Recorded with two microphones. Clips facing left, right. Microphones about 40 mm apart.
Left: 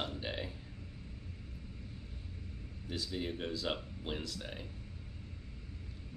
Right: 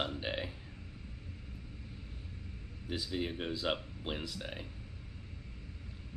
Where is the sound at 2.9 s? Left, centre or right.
Centre.